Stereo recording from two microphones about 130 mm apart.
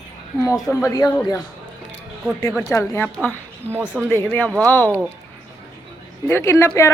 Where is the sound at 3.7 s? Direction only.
15° right (ahead or behind).